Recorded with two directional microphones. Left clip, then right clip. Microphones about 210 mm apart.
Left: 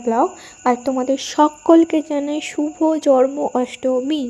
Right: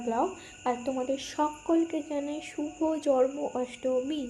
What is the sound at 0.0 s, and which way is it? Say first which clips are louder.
Speech: left 11 dB; 45° left (ahead or behind).